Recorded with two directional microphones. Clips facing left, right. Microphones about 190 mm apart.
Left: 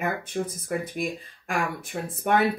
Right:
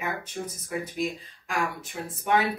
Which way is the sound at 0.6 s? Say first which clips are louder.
Left 1 dB; 55° left (ahead or behind).